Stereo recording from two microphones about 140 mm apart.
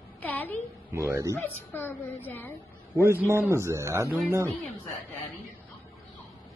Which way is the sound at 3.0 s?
20° right (ahead or behind).